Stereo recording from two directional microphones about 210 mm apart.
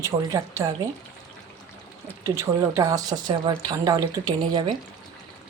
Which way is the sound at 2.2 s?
15° right (ahead or behind).